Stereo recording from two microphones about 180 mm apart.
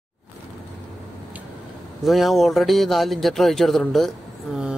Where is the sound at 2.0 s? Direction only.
Centre (ahead or behind).